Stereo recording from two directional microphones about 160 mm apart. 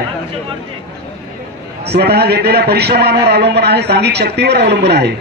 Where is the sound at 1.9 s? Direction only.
90° right.